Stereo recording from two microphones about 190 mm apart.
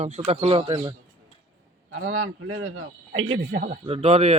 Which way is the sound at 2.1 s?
90° right.